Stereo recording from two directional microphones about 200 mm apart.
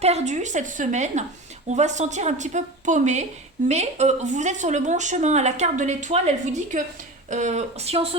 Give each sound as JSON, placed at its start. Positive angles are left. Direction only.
{"t": 0.0, "sound": "speech", "side_deg": -35}